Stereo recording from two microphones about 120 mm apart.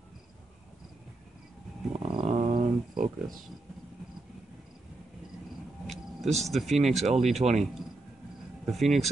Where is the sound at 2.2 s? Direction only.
75° right (ahead or behind).